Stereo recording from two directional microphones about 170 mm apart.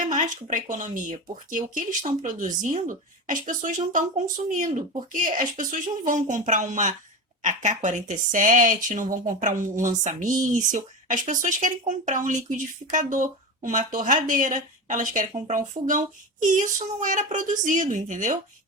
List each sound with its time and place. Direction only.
0.0 s speech: 45° right (ahead or behind)